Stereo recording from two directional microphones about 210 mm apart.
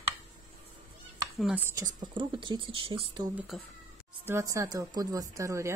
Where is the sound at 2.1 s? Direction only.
20° right (ahead or behind).